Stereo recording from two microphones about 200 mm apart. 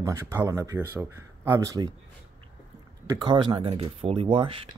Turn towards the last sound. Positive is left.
turn(degrees=-25)  # may be behind; listen again after turning